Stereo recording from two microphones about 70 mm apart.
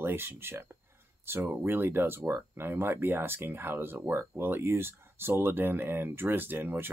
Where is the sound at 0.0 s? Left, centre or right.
Right.